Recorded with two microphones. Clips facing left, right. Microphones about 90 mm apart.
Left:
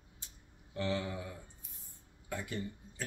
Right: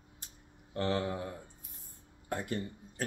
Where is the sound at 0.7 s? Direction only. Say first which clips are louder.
Right 4 dB; 50° right (ahead or behind).